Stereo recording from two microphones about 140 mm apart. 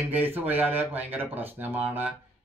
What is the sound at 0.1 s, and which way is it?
Speech, 15° right (ahead or behind).